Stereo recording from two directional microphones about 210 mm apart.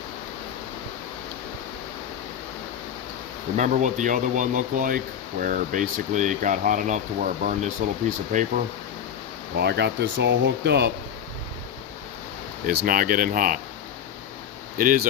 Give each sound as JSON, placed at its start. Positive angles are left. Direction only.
{"t": 3.6, "sound": "speech", "side_deg": -35}
{"t": 9.6, "sound": "speech", "side_deg": -50}
{"t": 12.6, "sound": "speech", "side_deg": -40}
{"t": 14.8, "sound": "speech", "side_deg": -40}